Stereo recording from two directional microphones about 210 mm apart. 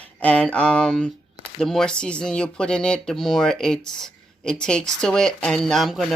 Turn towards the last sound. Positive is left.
turn(degrees=0)  # may be behind; listen again after turning